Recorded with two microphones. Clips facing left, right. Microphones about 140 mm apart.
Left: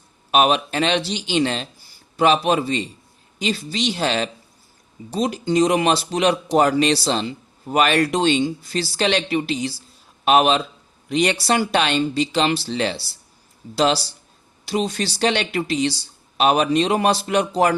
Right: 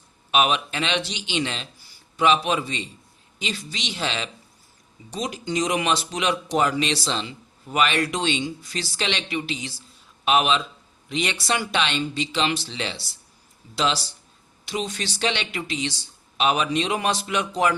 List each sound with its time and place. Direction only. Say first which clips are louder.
0.3 s speech: left 4 dB; 40° left (ahead or behind)